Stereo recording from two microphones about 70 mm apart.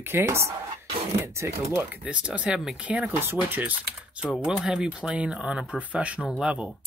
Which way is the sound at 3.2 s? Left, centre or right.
Right.